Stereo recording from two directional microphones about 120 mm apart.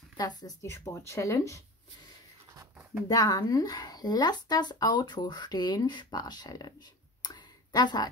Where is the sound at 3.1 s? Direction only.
30° left (ahead or behind).